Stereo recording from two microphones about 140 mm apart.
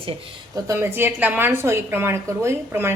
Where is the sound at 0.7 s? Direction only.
15° right (ahead or behind).